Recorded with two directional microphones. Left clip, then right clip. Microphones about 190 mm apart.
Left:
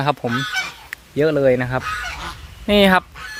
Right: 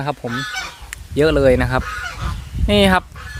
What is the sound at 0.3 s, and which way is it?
Goose, 30° left (ahead or behind).